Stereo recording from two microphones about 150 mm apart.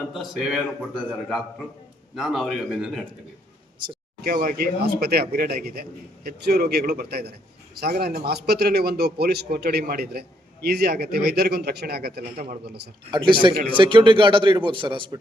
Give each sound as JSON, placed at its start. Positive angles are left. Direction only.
{"t": 0.1, "sound": "speech", "side_deg": 0}
{"t": 2.1, "sound": "speech", "side_deg": 0}
{"t": 4.2, "sound": "a man's voice", "side_deg": -75}
{"t": 13.1, "sound": "a man's voice", "side_deg": -35}